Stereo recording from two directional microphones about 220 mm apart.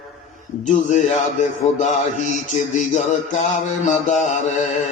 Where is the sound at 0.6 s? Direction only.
35° left (ahead or behind).